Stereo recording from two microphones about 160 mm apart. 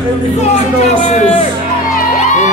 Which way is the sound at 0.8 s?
45° left (ahead or behind).